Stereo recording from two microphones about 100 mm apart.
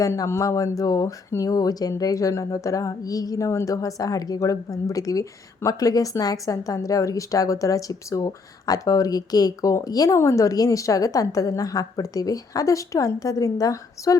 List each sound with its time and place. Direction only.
0.0 s speech: 30° left (ahead or behind)